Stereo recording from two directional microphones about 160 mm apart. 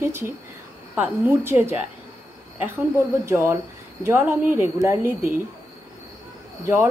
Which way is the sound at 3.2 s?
15° right (ahead or behind).